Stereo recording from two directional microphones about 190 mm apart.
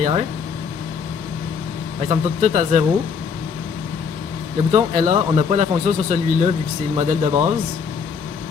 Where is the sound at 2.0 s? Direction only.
40° right (ahead or behind).